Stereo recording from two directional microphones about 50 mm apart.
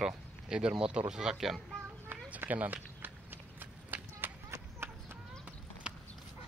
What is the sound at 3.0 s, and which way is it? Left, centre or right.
Run, right.